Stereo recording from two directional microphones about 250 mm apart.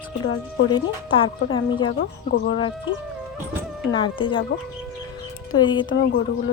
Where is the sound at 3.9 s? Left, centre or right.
Centre.